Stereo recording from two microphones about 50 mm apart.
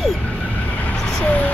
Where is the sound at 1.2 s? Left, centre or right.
Left.